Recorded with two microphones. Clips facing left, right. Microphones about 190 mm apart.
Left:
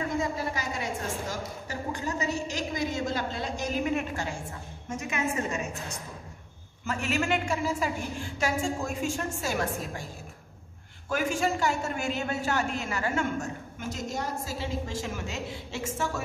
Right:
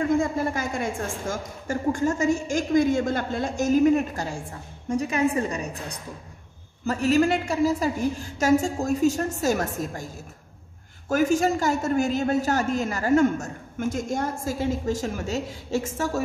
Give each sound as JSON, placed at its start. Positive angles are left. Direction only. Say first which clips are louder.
{"t": 0.2, "sound": "a woman's voice", "louder": "right 5 dB", "side_deg": -50}
{"t": 11.1, "sound": "a man's voice", "louder": "right 7 dB", "side_deg": -40}